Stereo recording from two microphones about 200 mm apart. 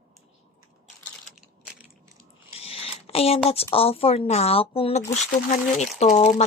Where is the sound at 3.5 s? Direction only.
30° left (ahead or behind).